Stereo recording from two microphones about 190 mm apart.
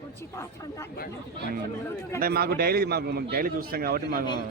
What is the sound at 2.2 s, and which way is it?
Speech, 55° right (ahead or behind).